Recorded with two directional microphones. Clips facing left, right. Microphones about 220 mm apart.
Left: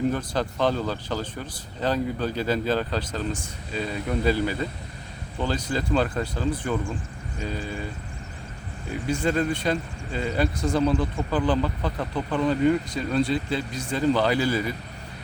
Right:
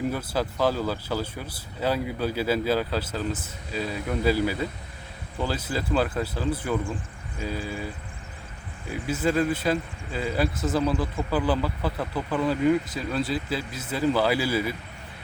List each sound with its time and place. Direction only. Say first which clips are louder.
0.1 s speech: left 1 dB; 5° right (ahead or behind)
8.9 s speech: even; 5° right (ahead or behind)